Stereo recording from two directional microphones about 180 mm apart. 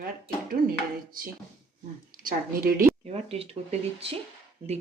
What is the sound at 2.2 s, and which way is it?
Speech, 55° right (ahead or behind).